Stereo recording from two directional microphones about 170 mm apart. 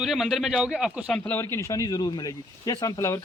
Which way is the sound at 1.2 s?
10° left (ahead or behind).